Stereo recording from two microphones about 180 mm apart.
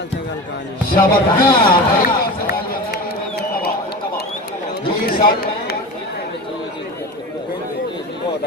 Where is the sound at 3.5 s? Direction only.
60° left (ahead or behind).